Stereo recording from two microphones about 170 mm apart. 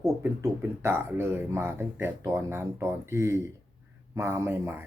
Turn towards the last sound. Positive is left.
turn(degrees=-15)  # may be behind; listen again after turning